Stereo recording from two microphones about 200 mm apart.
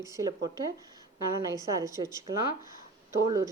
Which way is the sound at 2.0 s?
20° right (ahead or behind).